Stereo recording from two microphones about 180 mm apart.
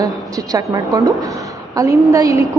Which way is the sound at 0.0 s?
20° right (ahead or behind).